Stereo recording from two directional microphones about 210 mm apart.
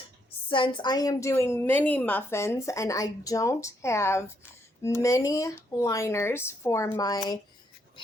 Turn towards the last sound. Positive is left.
turn(degrees=20)  # may be behind; listen again after turning